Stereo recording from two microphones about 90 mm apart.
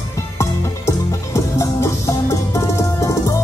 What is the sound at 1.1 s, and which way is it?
Music, 35° left (ahead or behind).